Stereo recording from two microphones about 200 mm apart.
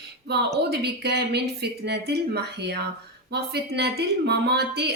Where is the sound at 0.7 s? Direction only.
55° right (ahead or behind).